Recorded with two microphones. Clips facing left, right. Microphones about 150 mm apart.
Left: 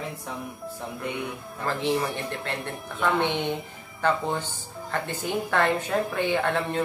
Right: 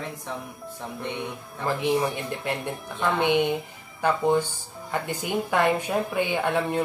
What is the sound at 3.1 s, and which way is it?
A woman's voice, 10° right (ahead or behind).